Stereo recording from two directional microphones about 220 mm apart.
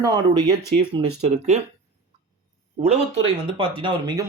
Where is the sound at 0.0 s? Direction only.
15° right (ahead or behind).